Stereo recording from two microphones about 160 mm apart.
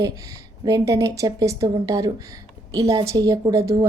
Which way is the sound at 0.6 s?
20° right (ahead or behind).